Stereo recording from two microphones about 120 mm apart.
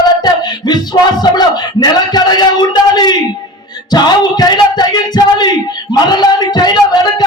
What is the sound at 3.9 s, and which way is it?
Speech, 35° left (ahead or behind).